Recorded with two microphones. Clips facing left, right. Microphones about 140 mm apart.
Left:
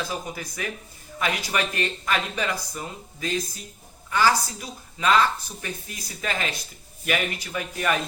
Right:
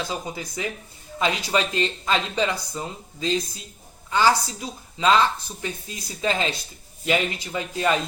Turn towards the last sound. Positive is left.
turn(degrees=-25)  # may be behind; listen again after turning